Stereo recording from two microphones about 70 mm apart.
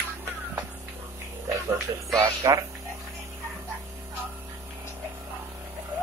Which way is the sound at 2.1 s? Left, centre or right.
Right.